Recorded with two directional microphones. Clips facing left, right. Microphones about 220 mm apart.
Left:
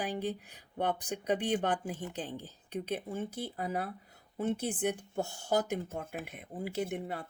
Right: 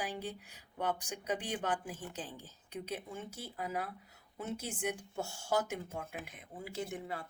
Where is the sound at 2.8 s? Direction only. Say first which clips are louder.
Left 7 dB; 35° left (ahead or behind).